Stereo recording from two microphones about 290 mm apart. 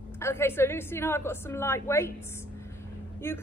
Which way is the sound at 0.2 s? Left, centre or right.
Centre.